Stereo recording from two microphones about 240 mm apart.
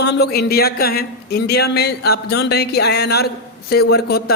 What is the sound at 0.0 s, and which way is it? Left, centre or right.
A man's voice, left.